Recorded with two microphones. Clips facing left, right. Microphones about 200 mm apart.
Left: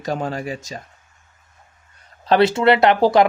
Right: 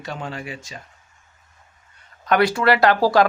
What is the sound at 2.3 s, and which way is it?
Speech, 25° left (ahead or behind).